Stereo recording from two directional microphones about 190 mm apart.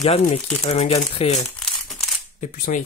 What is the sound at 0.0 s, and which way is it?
Speech, 35° left (ahead or behind).